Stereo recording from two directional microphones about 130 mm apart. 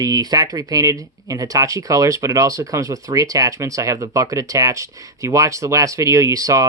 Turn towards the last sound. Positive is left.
turn(degrees=-25)  # may be behind; listen again after turning